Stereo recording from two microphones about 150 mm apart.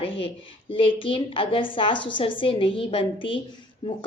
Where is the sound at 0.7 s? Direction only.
35° left (ahead or behind).